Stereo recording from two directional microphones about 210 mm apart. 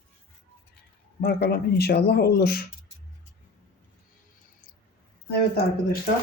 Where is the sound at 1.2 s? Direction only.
50° left (ahead or behind).